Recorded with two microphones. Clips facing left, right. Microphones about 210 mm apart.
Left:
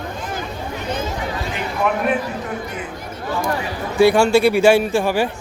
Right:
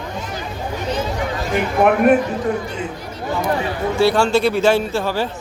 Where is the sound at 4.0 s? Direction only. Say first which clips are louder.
Left 3 dB; 10° left (ahead or behind).